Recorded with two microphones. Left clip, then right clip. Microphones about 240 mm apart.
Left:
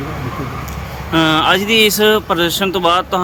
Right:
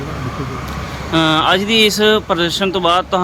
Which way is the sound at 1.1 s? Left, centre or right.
Centre.